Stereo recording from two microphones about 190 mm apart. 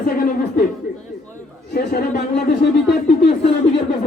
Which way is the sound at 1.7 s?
60° left (ahead or behind).